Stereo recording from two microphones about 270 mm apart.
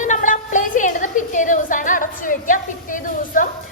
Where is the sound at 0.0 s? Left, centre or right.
Left.